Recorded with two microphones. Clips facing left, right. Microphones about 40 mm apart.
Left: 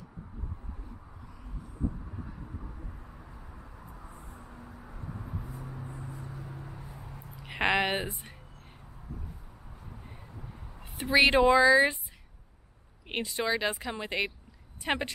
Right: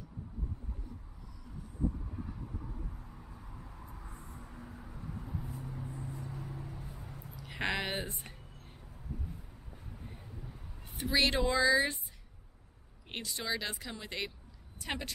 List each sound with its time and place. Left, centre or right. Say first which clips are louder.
3.1 s vehicle: left 2 dB; left
3.6 s vehicle: left 2 dB; centre
5.1 s vehicle: left 1 dB; left
6.5 s vehicle: left 1 dB; left
7.1 s a sound: left 2 dB; centre
7.3 s speech: left 8 dB; left
8.1 s speech: left 3 dB; centre
11.0 s speech: left 8 dB; left
13.1 s a woman's voice: left 7 dB; left